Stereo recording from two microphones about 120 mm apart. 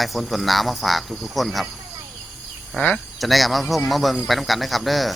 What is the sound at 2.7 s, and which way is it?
Speech, 5° left (ahead or behind).